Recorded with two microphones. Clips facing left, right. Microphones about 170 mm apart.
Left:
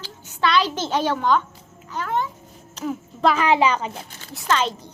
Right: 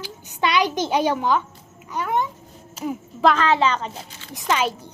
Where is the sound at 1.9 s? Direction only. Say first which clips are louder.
Right 2 dB; 15° right (ahead or behind).